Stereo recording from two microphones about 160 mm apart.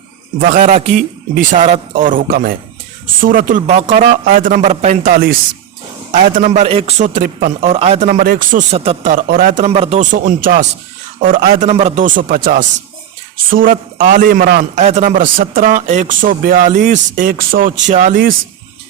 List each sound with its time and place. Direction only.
0.5 s a man's voice: 50° right (ahead or behind)
3.7 s speech: 40° right (ahead or behind)
4.3 s speech: 65° right (ahead or behind)
4.5 s a man's voice: 45° right (ahead or behind); by 5.4 s 60° right (ahead or behind)
6.1 s a man's voice: 50° right (ahead or behind)
7.6 s a man's voice: 40° right (ahead or behind)
8.1 s speech: 65° right (ahead or behind)
8.7 s speech: 40° right (ahead or behind)
9.1 s speech: 55° right (ahead or behind)
9.6 s a man's voice: 40° right (ahead or behind); by 11.7 s 65° right (ahead or behind)
11.7 s speech: 40° right (ahead or behind)
12.0 s speech: 60° right (ahead or behind); by 14.6 s 75° right (ahead or behind)
14.8 s speech: 45° right (ahead or behind)